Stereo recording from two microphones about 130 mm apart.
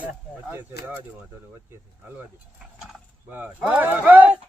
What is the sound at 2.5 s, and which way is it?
Speech, 5° right (ahead or behind).